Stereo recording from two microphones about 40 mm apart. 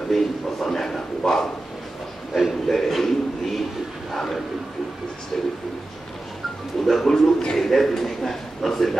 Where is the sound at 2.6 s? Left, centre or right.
Centre.